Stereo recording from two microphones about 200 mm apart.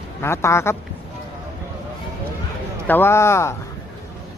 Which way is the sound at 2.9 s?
10° left (ahead or behind).